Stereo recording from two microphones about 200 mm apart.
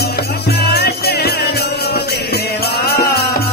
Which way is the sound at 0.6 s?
50° left (ahead or behind).